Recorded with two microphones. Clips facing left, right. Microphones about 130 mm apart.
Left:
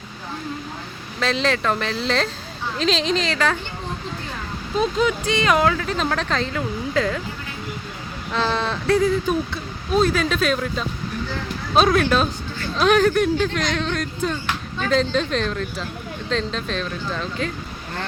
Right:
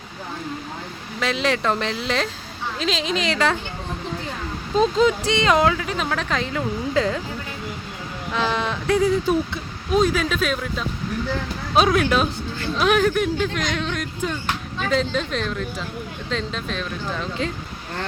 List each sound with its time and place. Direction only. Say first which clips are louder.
1.2 s speech: left 1 dB; 10° right (ahead or behind)
1.6 s speech: even; 20° right (ahead or behind)
3.2 s speech: right 1 dB; 20° right (ahead or behind)
4.8 s speech: right 3 dB; 30° right (ahead or behind)
8.3 s speech: left 1 dB; 10° right (ahead or behind)
9.0 s speech: right 2 dB; 20° right (ahead or behind)
9.9 s speech: even; 10° right (ahead or behind)